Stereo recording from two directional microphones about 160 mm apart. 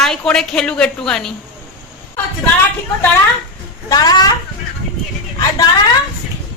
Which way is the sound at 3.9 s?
25° left (ahead or behind).